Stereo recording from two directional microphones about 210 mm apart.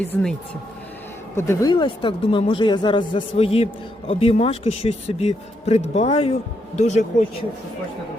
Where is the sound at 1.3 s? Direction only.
15° left (ahead or behind); by 7.2 s 35° left (ahead or behind).